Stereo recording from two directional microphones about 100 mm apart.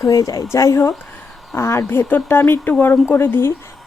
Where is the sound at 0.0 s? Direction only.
35° left (ahead or behind).